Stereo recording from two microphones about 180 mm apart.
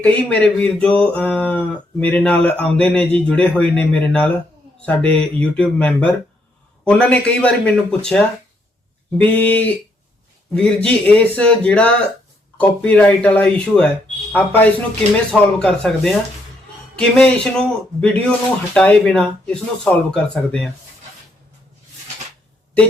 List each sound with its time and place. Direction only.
0.0 s speech: 10° left (ahead or behind)